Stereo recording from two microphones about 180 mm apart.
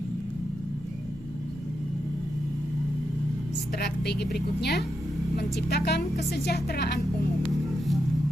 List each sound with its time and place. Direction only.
3.8 s speech: 65° left (ahead or behind)